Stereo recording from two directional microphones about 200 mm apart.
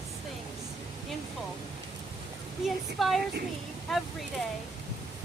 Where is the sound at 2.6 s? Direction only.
Centre (ahead or behind).